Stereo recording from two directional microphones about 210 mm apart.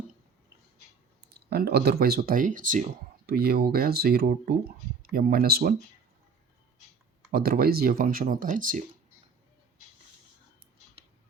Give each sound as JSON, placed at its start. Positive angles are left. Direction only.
{"t": 1.5, "sound": "speech", "side_deg": -50}
{"t": 7.3, "sound": "speech", "side_deg": -45}